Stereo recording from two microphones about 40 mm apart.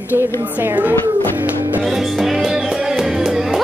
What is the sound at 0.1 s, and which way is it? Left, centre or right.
Speech, right.